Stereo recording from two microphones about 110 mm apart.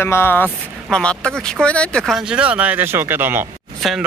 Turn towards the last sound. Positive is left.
turn(degrees=0)  # may be behind; listen again after turning